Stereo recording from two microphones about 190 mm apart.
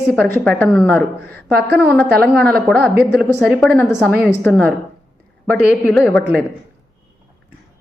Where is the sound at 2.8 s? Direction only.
55° right (ahead or behind).